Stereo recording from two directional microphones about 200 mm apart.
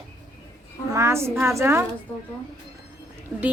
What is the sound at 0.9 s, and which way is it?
Speech, 15° right (ahead or behind).